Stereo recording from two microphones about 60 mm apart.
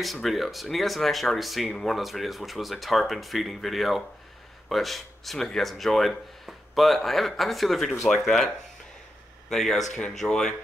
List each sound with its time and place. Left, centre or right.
0.0 s speech: centre
9.5 s speech: centre